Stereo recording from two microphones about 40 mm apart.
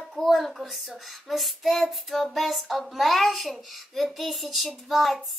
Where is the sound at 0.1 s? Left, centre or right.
Centre.